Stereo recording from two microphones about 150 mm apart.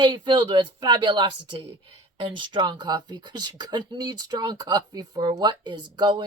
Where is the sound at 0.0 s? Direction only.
30° right (ahead or behind).